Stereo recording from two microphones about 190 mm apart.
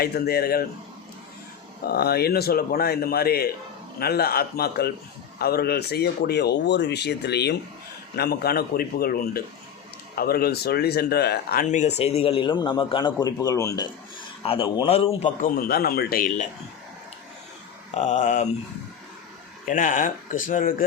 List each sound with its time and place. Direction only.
0.0 s a man's voice: 55° left (ahead or behind)
1.8 s a man's voice: 55° left (ahead or behind)
11.6 s a man's voice: 40° left (ahead or behind); by 13.8 s 15° left (ahead or behind)
14.4 s a man's voice: 30° left (ahead or behind)
15.4 s a man's voice: 50° left (ahead or behind)
17.9 s speech: 40° left (ahead or behind)
19.6 s a man's voice: 45° left (ahead or behind)